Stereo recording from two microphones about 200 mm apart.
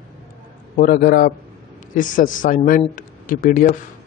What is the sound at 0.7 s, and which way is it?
A man's voice, 45° left (ahead or behind).